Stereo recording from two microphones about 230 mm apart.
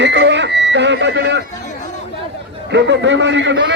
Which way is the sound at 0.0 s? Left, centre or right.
Right.